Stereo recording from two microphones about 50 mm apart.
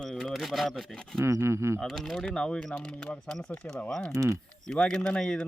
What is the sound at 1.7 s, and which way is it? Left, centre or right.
Speech, centre.